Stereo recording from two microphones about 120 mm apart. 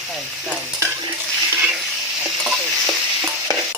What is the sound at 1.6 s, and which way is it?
Stir, 5° right (ahead or behind).